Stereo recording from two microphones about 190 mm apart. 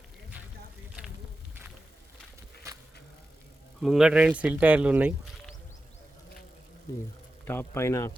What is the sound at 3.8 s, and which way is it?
Speech, 5° right (ahead or behind).